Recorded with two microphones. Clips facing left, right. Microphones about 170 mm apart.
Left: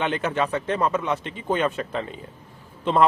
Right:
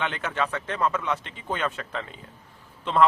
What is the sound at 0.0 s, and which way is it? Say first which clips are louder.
A man's voice: left 4 dB; 25° left (ahead or behind).